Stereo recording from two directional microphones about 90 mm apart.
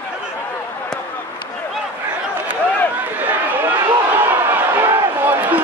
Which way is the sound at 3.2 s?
20° right (ahead or behind).